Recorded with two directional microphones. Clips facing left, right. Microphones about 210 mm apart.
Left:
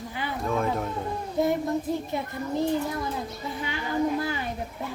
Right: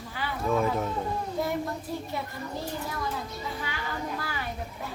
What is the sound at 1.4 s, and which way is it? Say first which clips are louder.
Speech: left 7 dB; 25° left (ahead or behind).